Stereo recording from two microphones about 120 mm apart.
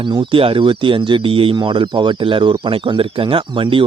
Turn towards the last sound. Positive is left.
turn(degrees=-45)  # may be behind; listen again after turning